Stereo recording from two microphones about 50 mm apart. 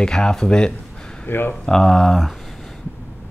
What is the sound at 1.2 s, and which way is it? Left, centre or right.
Speech, left.